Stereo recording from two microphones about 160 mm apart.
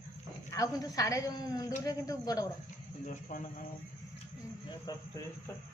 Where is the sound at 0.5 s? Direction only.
20° left (ahead or behind).